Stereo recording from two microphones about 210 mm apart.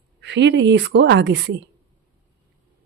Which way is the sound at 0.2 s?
55° right (ahead or behind).